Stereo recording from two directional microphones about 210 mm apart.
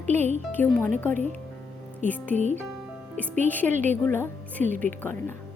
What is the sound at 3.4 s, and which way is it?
A woman's voice, 10° left (ahead or behind).